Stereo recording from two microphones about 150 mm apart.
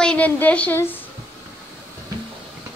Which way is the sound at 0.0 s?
10° left (ahead or behind).